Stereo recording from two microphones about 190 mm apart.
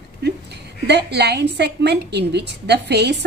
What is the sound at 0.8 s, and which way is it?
A woman's voice, 60° right (ahead or behind).